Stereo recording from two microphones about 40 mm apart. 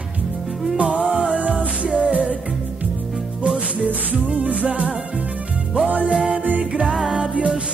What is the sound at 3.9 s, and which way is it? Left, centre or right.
Music, right.